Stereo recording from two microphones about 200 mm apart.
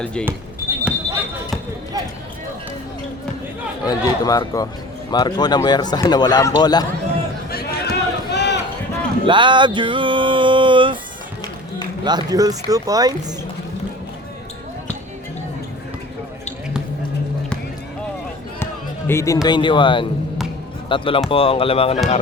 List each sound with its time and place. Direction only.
0.0 s speech: 5° left (ahead or behind)
0.9 s basketball bounce: 5° right (ahead or behind)
3.8 s speech: 20° left (ahead or behind)
7.5 s run: 55° left (ahead or behind)
9.2 s a sound: 25° right (ahead or behind)
12.0 s speech: 20° right (ahead or behind)
18.6 s music: 10° left (ahead or behind)
19.5 s speech: 25° left (ahead or behind)